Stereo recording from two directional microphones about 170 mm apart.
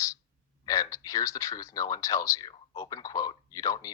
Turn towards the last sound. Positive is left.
turn(degrees=20)  # may be behind; listen again after turning